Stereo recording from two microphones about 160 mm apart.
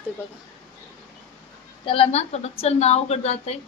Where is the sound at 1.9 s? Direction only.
40° left (ahead or behind).